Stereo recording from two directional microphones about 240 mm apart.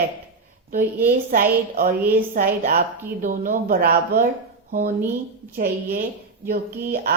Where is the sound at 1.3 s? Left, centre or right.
Right.